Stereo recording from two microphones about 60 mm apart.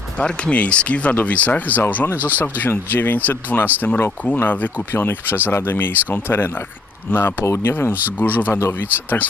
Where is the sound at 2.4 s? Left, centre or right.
Left.